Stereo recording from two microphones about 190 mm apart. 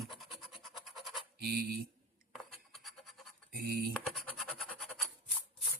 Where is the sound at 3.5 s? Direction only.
55° right (ahead or behind).